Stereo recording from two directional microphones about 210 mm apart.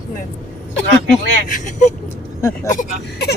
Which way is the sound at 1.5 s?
40° left (ahead or behind).